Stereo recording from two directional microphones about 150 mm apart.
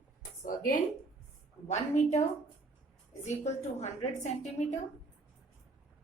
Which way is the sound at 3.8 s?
50° left (ahead or behind).